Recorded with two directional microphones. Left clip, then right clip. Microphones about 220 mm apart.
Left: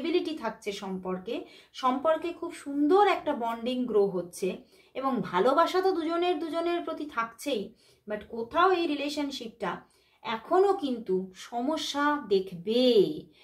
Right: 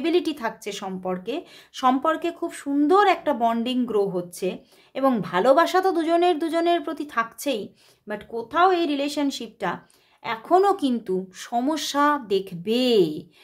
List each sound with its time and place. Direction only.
0.0 s speech: 45° right (ahead or behind)